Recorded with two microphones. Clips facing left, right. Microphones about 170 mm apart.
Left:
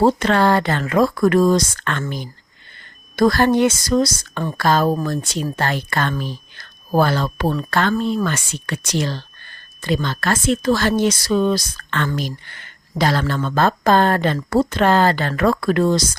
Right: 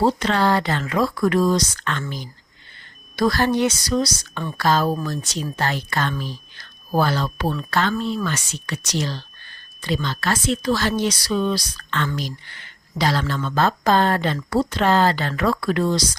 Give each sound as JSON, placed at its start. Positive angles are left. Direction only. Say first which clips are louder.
{"t": 0.0, "sound": "speech", "louder": "left 4 dB", "side_deg": 55}